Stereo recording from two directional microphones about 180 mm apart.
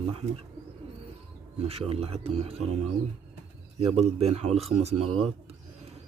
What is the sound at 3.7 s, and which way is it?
Speech, 35° right (ahead or behind).